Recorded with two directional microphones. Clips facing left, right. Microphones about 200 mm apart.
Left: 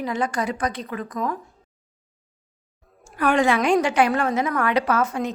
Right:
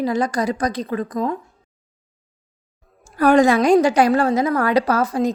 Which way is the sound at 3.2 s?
40° right (ahead or behind).